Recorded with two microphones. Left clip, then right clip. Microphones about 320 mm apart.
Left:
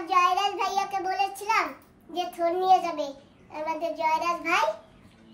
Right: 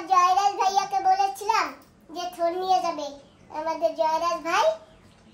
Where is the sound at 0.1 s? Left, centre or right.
Centre.